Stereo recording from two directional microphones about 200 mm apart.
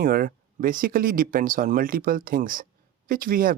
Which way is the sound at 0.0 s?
45° right (ahead or behind).